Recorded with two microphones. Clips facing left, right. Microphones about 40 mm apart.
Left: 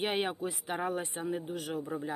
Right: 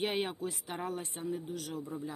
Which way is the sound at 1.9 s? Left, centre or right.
Left.